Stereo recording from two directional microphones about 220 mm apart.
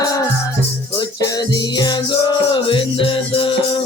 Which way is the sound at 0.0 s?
15° left (ahead or behind).